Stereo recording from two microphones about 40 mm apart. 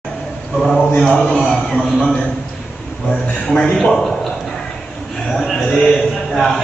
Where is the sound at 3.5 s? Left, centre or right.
Left.